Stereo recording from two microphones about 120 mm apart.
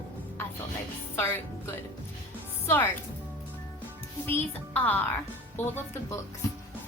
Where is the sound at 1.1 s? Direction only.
20° left (ahead or behind).